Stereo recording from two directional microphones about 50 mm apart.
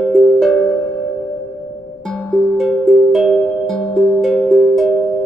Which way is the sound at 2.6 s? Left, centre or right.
Centre.